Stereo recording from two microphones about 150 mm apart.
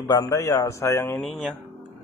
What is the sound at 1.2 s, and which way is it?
Speech, centre (ahead or behind).